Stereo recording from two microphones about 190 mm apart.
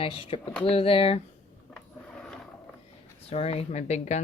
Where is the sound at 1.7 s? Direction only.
5° left (ahead or behind).